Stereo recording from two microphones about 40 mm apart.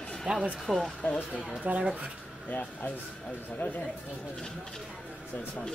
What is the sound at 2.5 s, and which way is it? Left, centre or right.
Speech, left.